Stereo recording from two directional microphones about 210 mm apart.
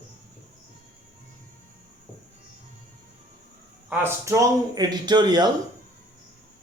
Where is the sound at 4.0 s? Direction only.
15° right (ahead or behind).